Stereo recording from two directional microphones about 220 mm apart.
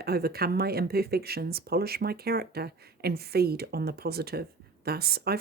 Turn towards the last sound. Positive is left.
turn(degrees=-45)  # may be behind; listen again after turning